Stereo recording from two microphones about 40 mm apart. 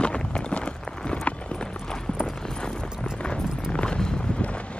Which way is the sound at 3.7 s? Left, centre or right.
Left.